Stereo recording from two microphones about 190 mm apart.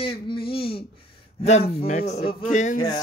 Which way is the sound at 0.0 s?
30° left (ahead or behind).